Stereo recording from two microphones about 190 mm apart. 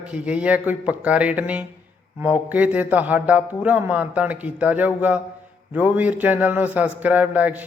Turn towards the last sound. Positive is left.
turn(degrees=-10)  # may be behind; listen again after turning